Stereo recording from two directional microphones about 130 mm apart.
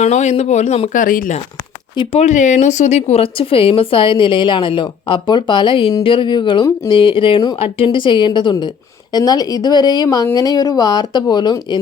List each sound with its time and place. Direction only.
0.0 s speech: 65° left (ahead or behind)
0.9 s speech: 90° left
2.1 s speech: 65° left (ahead or behind); by 11.8 s 35° left (ahead or behind)